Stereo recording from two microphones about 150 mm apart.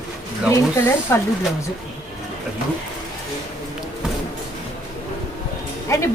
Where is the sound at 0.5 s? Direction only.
15° left (ahead or behind).